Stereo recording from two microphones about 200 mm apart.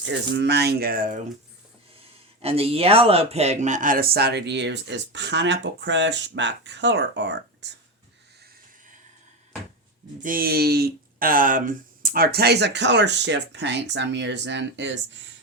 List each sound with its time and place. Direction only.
0.1 s speech: 60° right (ahead or behind)
2.4 s speech: 30° right (ahead or behind); by 7.7 s 60° right (ahead or behind)
10.2 s speech: 45° right (ahead or behind); by 15.3 s 65° right (ahead or behind)